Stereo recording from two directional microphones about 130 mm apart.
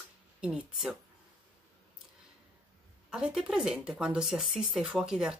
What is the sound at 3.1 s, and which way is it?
Speech, 5° right (ahead or behind).